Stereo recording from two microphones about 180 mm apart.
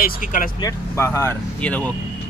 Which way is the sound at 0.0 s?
50° left (ahead or behind).